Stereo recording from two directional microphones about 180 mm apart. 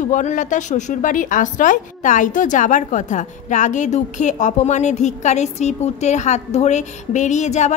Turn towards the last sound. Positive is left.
turn(degrees=40)  # may be behind; listen again after turning